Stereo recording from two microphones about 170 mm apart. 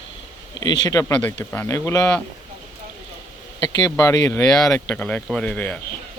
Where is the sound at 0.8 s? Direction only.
20° left (ahead or behind).